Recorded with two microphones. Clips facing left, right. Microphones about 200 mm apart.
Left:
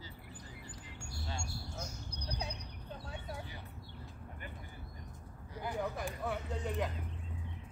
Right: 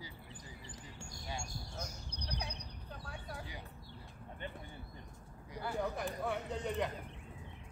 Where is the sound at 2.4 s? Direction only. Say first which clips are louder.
Left 2 dB; 25° left (ahead or behind).